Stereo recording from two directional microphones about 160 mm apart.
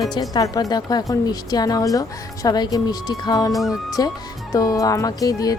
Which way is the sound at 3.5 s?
Centre (ahead or behind).